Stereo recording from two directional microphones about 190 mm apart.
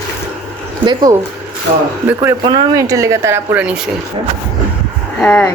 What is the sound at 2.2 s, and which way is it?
Speech, 20° right (ahead or behind).